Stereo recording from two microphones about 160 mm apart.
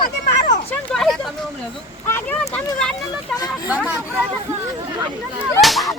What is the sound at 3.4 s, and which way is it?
Speech, 25° left (ahead or behind).